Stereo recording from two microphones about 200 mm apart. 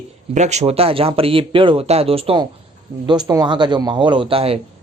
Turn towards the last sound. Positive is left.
turn(degrees=-30)  # may be behind; listen again after turning